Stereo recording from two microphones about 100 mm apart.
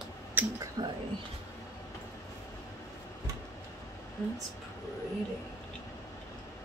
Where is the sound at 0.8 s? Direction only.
55° right (ahead or behind).